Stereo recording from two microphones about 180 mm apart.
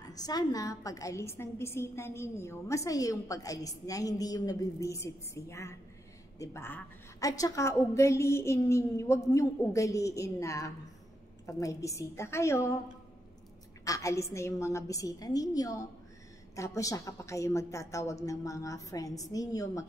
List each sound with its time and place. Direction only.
0.1 s a woman's voice: 20° left (ahead or behind)
13.8 s a woman's voice: 20° left (ahead or behind)